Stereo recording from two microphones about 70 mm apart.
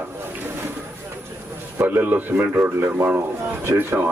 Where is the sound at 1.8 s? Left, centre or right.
Right.